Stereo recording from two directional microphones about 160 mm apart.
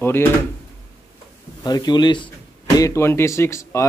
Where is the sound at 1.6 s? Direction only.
25° left (ahead or behind).